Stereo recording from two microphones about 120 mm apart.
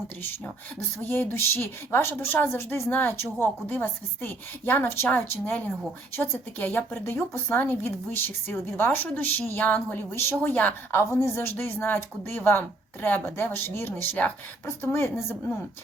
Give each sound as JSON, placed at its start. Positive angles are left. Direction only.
{"t": 1.0, "sound": "a woman's voice", "side_deg": 15}